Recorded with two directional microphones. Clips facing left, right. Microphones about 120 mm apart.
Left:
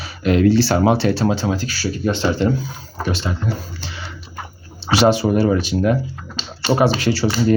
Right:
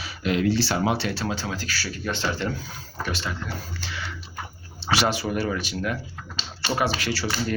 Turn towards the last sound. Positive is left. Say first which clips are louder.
# left 9 dB
turn(degrees=25)  # may be behind; listen again after turning